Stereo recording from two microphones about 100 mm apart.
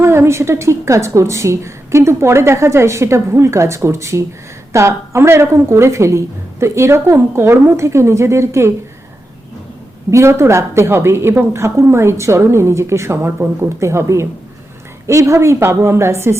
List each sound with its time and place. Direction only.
0.0 s a woman's voice: 25° right (ahead or behind)
10.1 s a woman's voice: 30° right (ahead or behind)